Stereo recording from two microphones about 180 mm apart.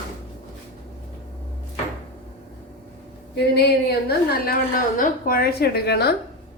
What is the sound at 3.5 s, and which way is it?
A woman's voice, 60° left (ahead or behind).